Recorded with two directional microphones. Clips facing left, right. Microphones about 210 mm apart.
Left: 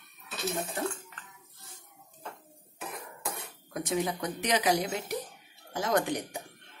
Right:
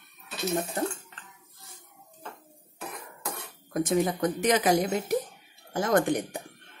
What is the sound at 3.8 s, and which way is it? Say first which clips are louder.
Speech: right 6 dB; 50° right (ahead or behind).